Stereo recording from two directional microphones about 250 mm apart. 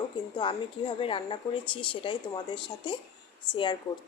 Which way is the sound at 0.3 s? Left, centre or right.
Centre.